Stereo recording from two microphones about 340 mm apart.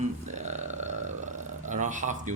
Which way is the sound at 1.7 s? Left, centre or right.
Right.